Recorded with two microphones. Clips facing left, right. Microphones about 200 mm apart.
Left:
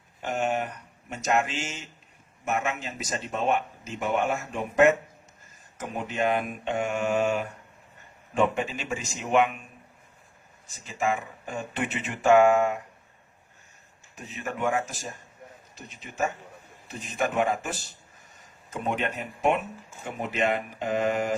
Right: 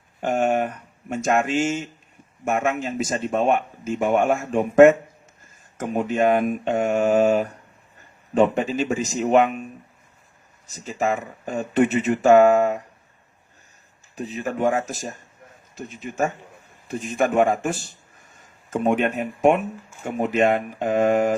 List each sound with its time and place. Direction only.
0.2 s speech: 50° right (ahead or behind)
10.8 s speech: 40° right (ahead or behind)
14.2 s speech: 35° right (ahead or behind)